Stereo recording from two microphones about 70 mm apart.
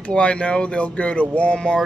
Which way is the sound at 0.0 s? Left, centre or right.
Centre.